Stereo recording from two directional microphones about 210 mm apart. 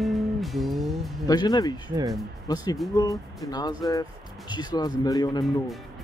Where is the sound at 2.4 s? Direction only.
20° left (ahead or behind).